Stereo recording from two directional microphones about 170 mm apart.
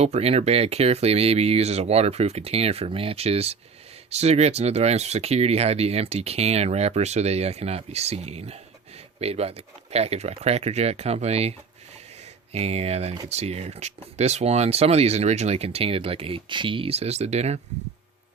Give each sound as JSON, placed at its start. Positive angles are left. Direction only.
{"t": 0.0, "sound": "speech", "side_deg": -35}
{"t": 12.5, "sound": "speech", "side_deg": -40}